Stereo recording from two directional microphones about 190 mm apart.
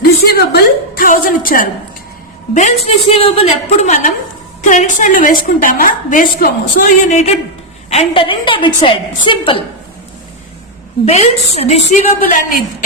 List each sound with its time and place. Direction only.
0.0 s a sound: 55° left (ahead or behind)
2.8 s a woman's voice: 30° left (ahead or behind); by 7.1 s 50° left (ahead or behind)
7.9 s a woman's voice: 30° left (ahead or behind)
11.0 s a woman's voice: 35° left (ahead or behind)